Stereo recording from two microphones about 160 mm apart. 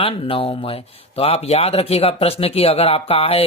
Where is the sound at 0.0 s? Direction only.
35° left (ahead or behind).